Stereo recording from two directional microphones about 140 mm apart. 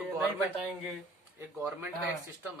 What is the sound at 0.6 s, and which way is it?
Speech, centre (ahead or behind).